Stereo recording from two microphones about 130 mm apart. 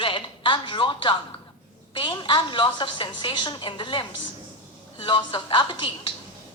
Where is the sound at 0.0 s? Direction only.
40° left (ahead or behind).